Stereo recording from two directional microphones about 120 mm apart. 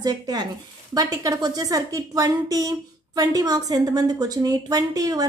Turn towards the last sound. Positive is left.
turn(degrees=-30)  # may be behind; listen again after turning